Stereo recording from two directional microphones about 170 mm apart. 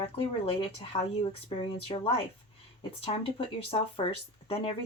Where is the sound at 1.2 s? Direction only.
35° left (ahead or behind).